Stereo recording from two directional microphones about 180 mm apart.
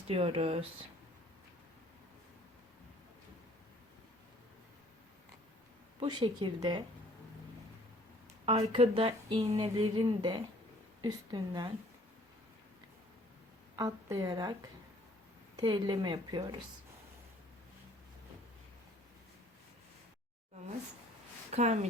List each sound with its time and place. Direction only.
0.1 s speech: 30° right (ahead or behind)
6.0 s speech: 25° right (ahead or behind)
8.4 s speech: 35° right (ahead or behind)
9.5 s speech: 20° right (ahead or behind)
13.7 s speech: 20° right (ahead or behind)
15.6 s speech: 25° right (ahead or behind)
21.5 s speech: 40° right (ahead or behind)